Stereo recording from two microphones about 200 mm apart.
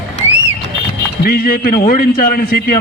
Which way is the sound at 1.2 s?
50° left (ahead or behind).